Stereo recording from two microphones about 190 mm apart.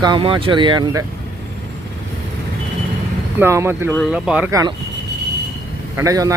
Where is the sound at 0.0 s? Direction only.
25° right (ahead or behind).